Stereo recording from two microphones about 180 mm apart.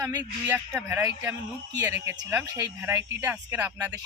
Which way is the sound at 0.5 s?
10° right (ahead or behind).